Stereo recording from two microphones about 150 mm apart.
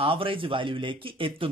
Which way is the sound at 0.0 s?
35° right (ahead or behind).